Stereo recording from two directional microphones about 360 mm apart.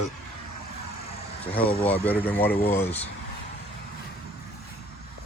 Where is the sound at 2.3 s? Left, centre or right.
Centre.